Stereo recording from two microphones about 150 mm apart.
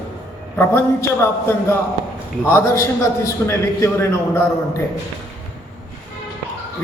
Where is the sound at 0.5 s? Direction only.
15° left (ahead or behind).